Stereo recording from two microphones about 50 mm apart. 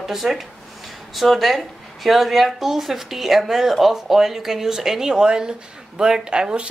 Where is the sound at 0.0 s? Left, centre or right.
Centre.